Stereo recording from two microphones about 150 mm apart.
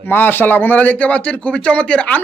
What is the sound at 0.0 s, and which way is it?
Speech, 15° left (ahead or behind).